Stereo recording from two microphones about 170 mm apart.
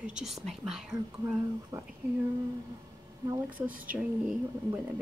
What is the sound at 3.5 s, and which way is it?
Speech, 10° right (ahead or behind).